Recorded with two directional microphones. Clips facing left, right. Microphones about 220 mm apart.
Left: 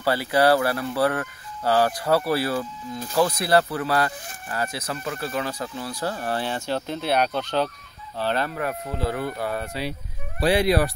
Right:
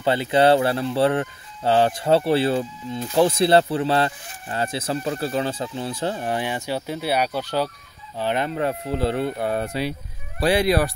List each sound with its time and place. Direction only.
0.0 s speech: 20° right (ahead or behind)